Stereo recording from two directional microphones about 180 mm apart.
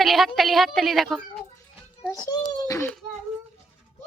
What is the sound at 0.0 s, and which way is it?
A woman's voice, centre (ahead or behind).